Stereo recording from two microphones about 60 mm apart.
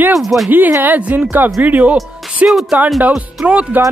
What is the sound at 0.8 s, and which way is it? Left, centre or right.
Speech, right.